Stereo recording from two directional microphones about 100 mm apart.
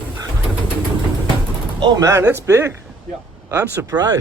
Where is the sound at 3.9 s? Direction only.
40° right (ahead or behind).